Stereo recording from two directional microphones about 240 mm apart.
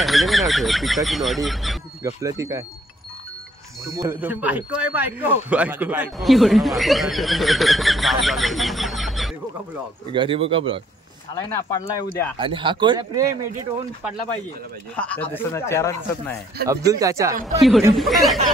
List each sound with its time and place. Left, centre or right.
0.0 s speech: centre
2.2 s speech: centre
3.8 s speech: centre
10.1 s speech: right
11.3 s speech: centre
12.4 s speech: right
15.0 s speech: centre
16.6 s speech: centre
17.6 s speech: centre